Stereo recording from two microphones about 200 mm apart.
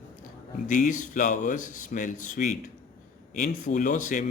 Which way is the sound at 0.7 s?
40° left (ahead or behind).